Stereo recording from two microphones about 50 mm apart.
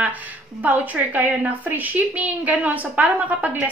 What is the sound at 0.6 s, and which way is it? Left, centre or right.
A woman's voice, right.